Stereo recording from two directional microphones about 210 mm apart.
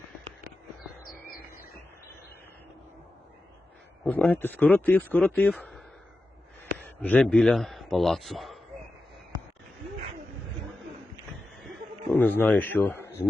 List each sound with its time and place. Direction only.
4.0 s speech: 5° left (ahead or behind)
6.8 s a man's voice: 5° left (ahead or behind)
12.1 s speech: 10° left (ahead or behind)